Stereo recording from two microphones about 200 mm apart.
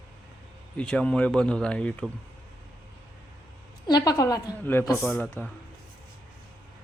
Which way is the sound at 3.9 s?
20° left (ahead or behind).